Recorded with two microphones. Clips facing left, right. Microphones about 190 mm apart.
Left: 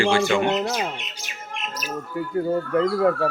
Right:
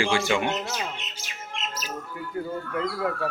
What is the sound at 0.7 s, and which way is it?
Speech, 40° left (ahead or behind).